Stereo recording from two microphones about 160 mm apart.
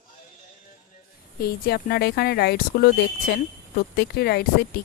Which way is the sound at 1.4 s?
75° left (ahead or behind).